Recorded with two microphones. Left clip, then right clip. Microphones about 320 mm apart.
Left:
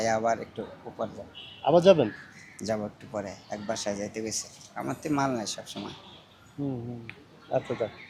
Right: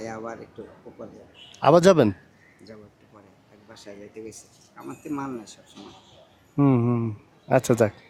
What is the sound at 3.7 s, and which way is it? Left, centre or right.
Speech, left.